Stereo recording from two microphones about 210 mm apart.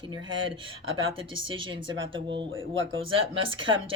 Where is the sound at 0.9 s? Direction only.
70° right (ahead or behind).